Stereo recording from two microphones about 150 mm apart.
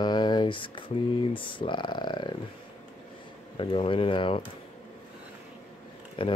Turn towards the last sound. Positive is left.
turn(degrees=30)  # may be behind; listen again after turning